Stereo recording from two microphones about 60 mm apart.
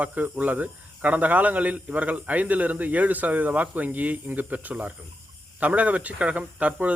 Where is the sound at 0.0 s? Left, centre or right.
Right.